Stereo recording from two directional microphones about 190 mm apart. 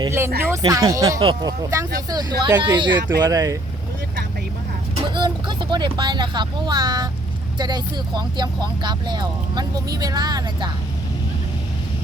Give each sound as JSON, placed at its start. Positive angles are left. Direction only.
{"t": 0.0, "sound": "speech", "side_deg": -15}
{"t": 5.1, "sound": "speech", "side_deg": -25}